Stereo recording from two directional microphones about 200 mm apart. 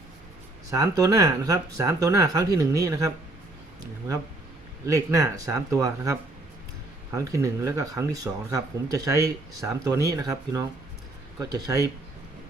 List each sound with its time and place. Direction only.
0.7 s speech: 15° right (ahead or behind)
4.9 s speech: 15° right (ahead or behind)